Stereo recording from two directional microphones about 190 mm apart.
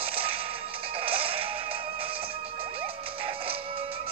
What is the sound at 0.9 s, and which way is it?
Music, 30° right (ahead or behind).